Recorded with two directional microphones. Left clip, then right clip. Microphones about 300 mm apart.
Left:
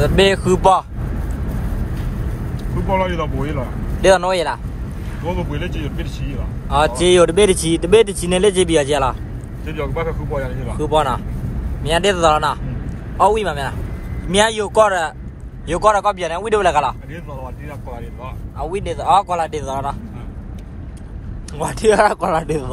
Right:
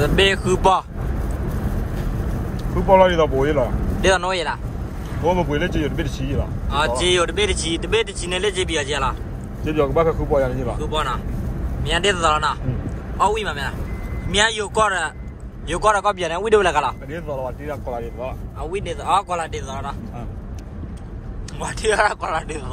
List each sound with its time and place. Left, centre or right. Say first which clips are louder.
0.0 s speech: left 3 dB; centre
2.9 s speech: right 6 dB; right
4.0 s speech: left 5 dB; centre
5.2 s speech: right 5 dB; right
7.0 s speech: left 9 dB; centre
9.7 s speech: right 5 dB; right
10.8 s speech: left 10 dB; centre
18.6 s speech: left 4 dB; centre
21.5 s speech: left 5 dB; centre